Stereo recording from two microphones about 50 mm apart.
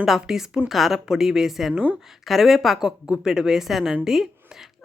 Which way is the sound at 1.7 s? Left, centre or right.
Right.